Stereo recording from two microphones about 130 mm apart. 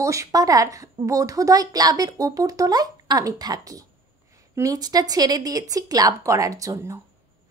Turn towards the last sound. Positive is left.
turn(degrees=-25)  # may be behind; listen again after turning